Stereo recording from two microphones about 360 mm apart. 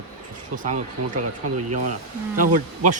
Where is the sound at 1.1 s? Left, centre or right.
Right.